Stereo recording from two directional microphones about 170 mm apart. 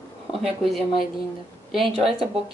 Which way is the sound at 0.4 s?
Centre (ahead or behind).